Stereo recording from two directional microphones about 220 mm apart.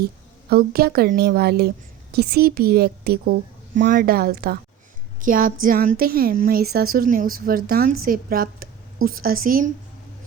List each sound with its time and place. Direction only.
0.5 s a woman's voice: 45° right (ahead or behind)